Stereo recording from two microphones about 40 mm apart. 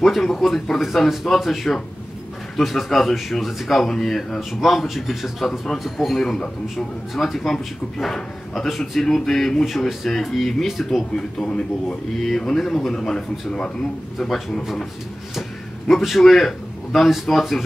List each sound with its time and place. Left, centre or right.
0.0 s speech: centre
4.4 s speech: centre
6.2 s speech: centre
7.2 s speech: centre
9.7 s speech: centre
11.4 s speech: left
12.2 s speech: centre
15.9 s a man's voice: centre